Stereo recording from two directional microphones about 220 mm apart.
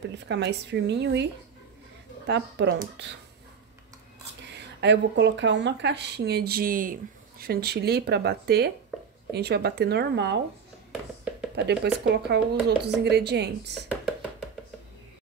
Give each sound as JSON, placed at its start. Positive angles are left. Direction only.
{"t": 0.2, "sound": "speech", "side_deg": -50}
{"t": 4.7, "sound": "speech", "side_deg": -50}
{"t": 11.5, "sound": "speech", "side_deg": -50}